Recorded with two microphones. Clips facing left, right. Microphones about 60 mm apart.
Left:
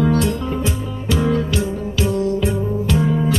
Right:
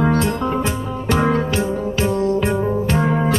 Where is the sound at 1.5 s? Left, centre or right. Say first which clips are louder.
Right 2 dB; right.